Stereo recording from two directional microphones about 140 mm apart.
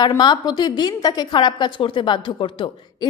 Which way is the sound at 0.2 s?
30° left (ahead or behind).